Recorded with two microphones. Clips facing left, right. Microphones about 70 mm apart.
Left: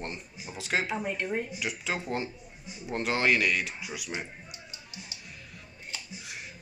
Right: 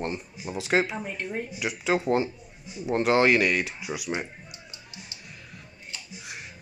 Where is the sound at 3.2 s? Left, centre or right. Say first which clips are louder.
Right 4 dB; right.